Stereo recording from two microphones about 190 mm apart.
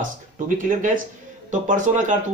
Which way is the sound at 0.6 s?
45° right (ahead or behind).